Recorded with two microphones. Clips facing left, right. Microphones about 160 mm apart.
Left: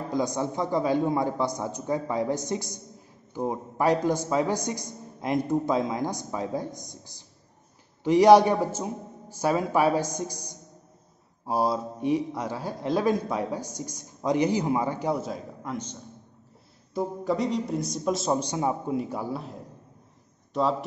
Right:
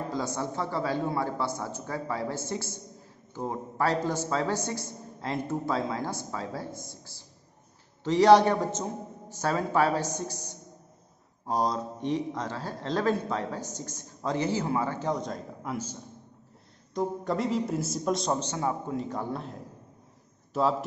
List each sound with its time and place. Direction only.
0.1 s a man's voice: 15° left (ahead or behind)
18.3 s a man's voice: 15° left (ahead or behind)
20.5 s a man's voice: 5° right (ahead or behind)